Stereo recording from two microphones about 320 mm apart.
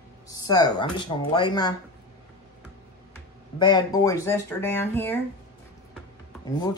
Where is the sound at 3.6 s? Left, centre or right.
Centre.